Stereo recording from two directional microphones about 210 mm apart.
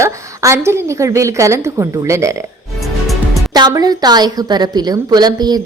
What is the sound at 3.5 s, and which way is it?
A woman's voice, 20° right (ahead or behind).